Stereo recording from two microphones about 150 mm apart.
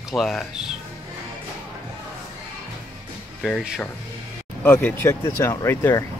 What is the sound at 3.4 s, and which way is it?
Speech, centre (ahead or behind).